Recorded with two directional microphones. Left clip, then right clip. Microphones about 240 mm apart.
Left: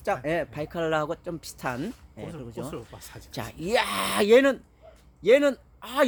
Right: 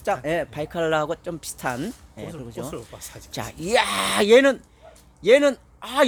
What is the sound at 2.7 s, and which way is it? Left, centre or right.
Speech, left.